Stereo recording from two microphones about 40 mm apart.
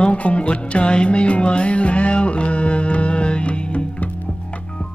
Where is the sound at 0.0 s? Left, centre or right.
Left.